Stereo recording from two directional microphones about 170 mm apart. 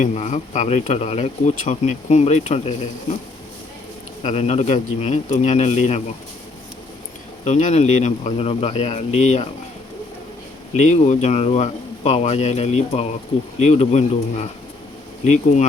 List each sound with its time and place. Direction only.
0.0 s speech: 45° left (ahead or behind)
4.2 s speech: 40° left (ahead or behind)
7.4 s speech: 45° left (ahead or behind)
10.8 s speech: 45° left (ahead or behind)